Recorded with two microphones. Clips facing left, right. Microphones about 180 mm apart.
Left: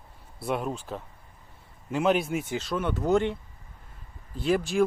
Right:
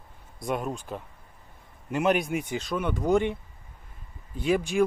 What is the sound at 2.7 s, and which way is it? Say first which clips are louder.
Speech: even; 10° right (ahead or behind).